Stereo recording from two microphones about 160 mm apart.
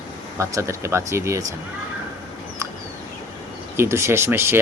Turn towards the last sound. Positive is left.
turn(degrees=-15)  # may be behind; listen again after turning